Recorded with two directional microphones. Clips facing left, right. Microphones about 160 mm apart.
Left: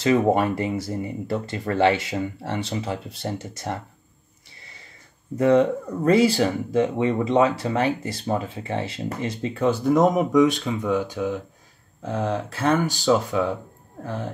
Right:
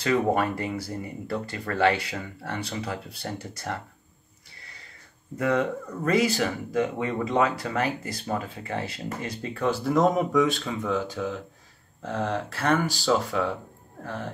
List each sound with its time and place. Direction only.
0.0 s speech: 20° left (ahead or behind)
5.4 s speech: 25° left (ahead or behind)